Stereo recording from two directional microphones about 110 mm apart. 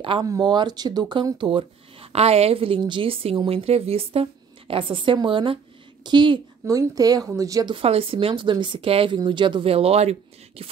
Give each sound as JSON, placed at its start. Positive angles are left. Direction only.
{"t": 0.2, "sound": "speech", "side_deg": -40}
{"t": 6.7, "sound": "speech", "side_deg": -30}
{"t": 7.6, "sound": "speech", "side_deg": -55}